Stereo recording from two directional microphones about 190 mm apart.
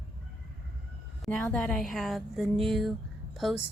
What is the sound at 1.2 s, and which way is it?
A woman's voice, centre (ahead or behind).